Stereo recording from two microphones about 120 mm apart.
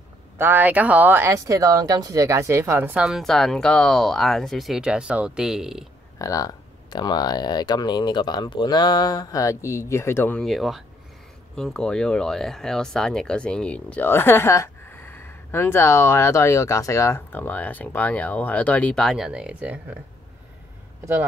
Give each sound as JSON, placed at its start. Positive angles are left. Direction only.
{"t": 0.4, "sound": "speech", "side_deg": -15}
{"t": 6.1, "sound": "speech", "side_deg": 30}
{"t": 10.4, "sound": "speech", "side_deg": 0}
{"t": 19.0, "sound": "speech", "side_deg": -5}